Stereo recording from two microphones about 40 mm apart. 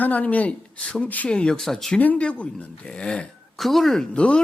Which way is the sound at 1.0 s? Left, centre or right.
Left.